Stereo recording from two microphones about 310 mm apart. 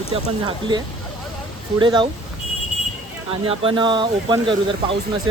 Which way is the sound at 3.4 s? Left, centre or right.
Centre.